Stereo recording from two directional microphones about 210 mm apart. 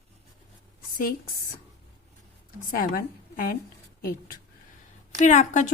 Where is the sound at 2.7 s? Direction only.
40° left (ahead or behind).